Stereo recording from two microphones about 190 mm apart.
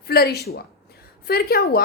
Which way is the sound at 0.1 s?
55° left (ahead or behind).